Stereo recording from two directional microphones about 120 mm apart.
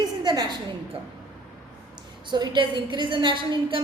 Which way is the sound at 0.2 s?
40° right (ahead or behind).